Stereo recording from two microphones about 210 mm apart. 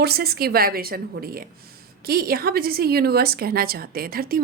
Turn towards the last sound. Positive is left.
turn(degrees=-45)  # may be behind; listen again after turning